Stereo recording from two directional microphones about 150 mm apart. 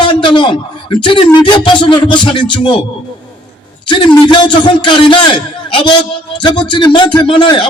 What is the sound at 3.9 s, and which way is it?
A man's voice, 30° left (ahead or behind).